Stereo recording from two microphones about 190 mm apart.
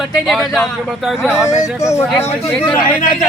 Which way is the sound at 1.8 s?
15° left (ahead or behind).